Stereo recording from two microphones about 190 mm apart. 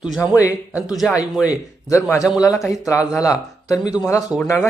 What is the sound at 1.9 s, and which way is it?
Speech, 15° left (ahead or behind).